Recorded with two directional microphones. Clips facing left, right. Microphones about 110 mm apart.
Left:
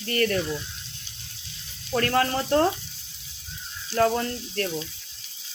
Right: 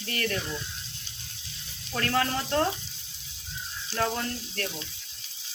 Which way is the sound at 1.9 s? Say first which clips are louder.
Left 4 dB; 40° left (ahead or behind).